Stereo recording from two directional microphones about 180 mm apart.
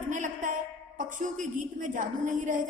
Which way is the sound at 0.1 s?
45° right (ahead or behind).